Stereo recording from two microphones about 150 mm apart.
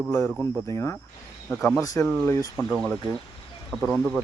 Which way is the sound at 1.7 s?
25° left (ahead or behind).